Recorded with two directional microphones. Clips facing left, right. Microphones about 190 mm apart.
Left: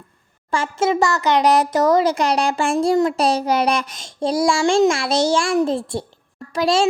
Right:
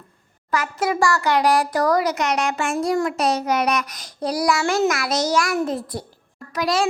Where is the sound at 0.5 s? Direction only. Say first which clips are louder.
Left 3 dB; 25° left (ahead or behind).